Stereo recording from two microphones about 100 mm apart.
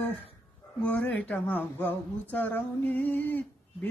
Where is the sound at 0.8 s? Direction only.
15° left (ahead or behind).